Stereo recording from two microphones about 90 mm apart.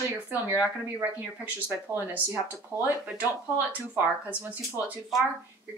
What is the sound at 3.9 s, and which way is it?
Speech, 20° right (ahead or behind).